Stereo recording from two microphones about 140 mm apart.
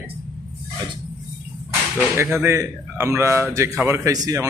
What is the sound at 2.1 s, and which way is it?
A man's voice, 15° right (ahead or behind).